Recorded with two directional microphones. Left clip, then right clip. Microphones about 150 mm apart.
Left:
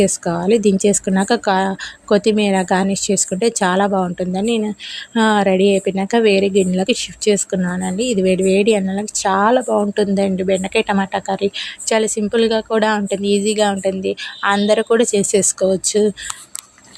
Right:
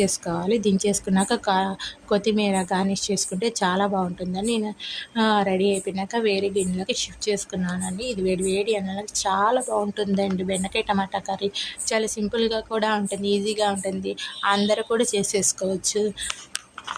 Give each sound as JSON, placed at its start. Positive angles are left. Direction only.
{"t": 0.0, "sound": "speech", "side_deg": 35}